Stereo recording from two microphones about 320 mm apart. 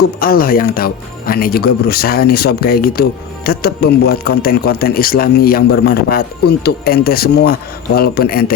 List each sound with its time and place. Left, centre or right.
0.0 s speech: left